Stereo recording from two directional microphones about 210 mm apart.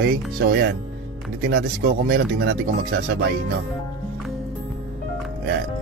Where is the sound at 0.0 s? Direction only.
50° right (ahead or behind).